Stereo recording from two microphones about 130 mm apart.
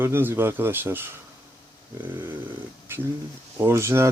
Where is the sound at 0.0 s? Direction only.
20° right (ahead or behind).